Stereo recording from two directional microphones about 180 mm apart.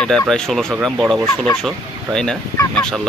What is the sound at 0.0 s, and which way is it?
Speech, 5° left (ahead or behind).